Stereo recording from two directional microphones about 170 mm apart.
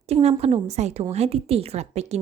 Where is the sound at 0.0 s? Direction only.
40° right (ahead or behind).